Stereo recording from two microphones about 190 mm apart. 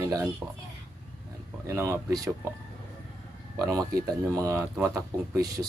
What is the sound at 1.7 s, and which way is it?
Speech, 15° right (ahead or behind).